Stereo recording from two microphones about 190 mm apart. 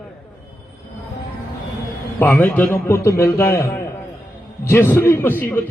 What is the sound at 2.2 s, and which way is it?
A man's voice, 10° left (ahead or behind).